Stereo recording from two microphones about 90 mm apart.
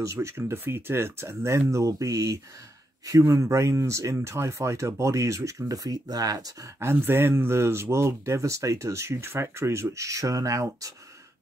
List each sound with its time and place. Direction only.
0.0 s speech: 35° right (ahead or behind)
6.8 s speech: 25° right (ahead or behind)